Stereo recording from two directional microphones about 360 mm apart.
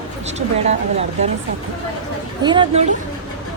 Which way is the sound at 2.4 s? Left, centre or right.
Centre.